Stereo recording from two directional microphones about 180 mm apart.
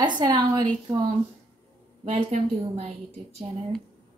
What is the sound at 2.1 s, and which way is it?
Speech, 35° right (ahead or behind).